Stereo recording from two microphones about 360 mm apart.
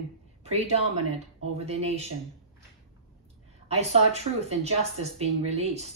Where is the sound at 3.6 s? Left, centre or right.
Centre.